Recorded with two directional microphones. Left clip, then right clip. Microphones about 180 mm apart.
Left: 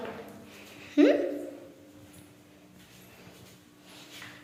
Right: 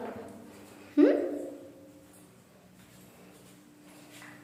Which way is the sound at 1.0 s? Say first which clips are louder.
Left 1 dB; 15° right (ahead or behind).